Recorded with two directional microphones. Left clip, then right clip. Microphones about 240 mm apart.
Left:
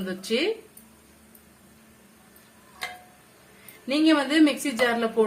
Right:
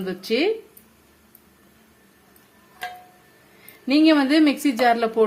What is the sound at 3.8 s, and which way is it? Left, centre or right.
A woman's voice, right.